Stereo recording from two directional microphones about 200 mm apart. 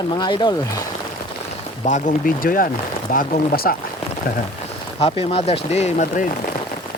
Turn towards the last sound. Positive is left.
turn(degrees=35)  # may be behind; listen again after turning